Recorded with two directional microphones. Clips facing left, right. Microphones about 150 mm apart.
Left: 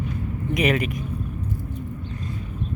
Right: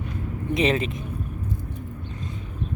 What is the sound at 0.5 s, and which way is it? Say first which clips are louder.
Speech: even; 25° right (ahead or behind).